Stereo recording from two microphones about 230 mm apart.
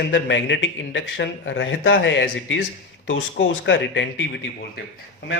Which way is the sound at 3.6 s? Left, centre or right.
Left.